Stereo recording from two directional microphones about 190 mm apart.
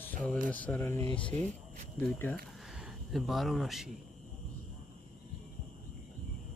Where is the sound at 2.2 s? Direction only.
10° left (ahead or behind).